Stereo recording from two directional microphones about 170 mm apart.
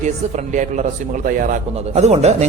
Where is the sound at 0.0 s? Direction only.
45° right (ahead or behind).